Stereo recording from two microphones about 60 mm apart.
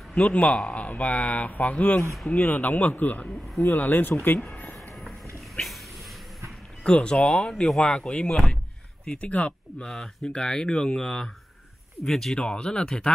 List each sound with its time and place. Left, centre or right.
0.1 s speech: left
3.3 s speech: centre
3.6 s speech: left
6.8 s speech: centre
9.8 s speech: centre